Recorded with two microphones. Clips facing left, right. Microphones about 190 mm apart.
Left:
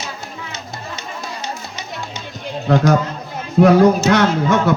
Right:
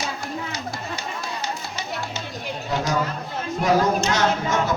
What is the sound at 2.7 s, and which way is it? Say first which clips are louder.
Speech: left 10 dB; 60° left (ahead or behind).